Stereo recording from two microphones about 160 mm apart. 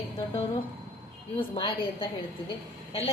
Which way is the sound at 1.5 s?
35° left (ahead or behind).